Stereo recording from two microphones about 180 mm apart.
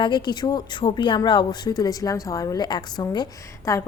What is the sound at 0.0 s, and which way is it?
A woman's voice, 25° left (ahead or behind).